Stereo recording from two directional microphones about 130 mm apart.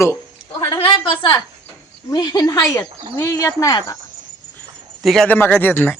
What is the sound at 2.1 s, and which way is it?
Speech, 30° left (ahead or behind).